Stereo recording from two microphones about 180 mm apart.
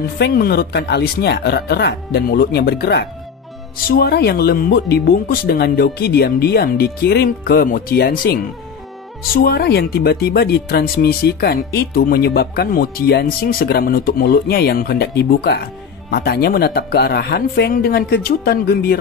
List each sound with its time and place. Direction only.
0.2 s speech: 60° left (ahead or behind)